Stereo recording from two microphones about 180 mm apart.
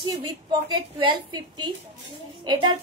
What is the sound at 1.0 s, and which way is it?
A woman's voice, 25° right (ahead or behind).